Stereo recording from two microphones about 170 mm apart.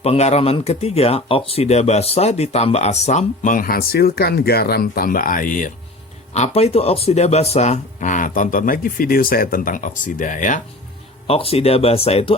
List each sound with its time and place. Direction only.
0.0 s speech: 40° left (ahead or behind)
6.3 s speech: 40° left (ahead or behind)
11.3 s speech: 35° left (ahead or behind)